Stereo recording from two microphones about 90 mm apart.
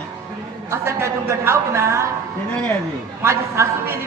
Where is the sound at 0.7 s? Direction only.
30° right (ahead or behind).